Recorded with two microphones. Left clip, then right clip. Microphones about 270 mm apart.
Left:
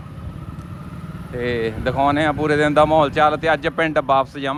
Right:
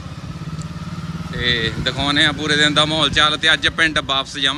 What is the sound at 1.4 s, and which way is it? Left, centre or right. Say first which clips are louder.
Speech: right 3 dB; centre.